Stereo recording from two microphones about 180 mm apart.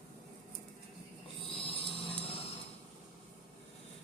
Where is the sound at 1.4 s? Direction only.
30° left (ahead or behind).